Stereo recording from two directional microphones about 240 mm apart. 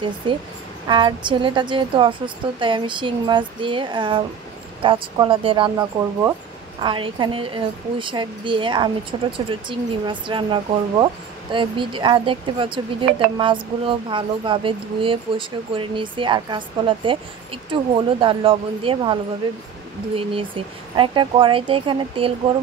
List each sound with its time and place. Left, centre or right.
0.8 s speech: centre
20.2 s speech: right